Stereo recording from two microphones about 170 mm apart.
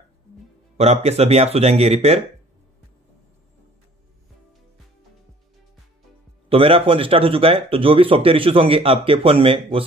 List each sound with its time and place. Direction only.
0.7 s speech: 40° right (ahead or behind)
6.5 s speech: 35° right (ahead or behind)